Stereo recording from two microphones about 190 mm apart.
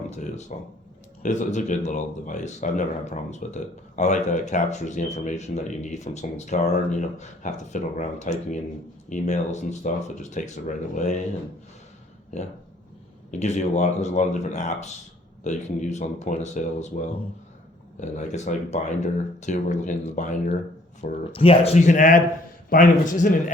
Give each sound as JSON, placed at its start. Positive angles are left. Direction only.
{"t": 0.1, "sound": "speech", "side_deg": 35}
{"t": 13.4, "sound": "speech", "side_deg": 40}
{"t": 18.0, "sound": "speech", "side_deg": 40}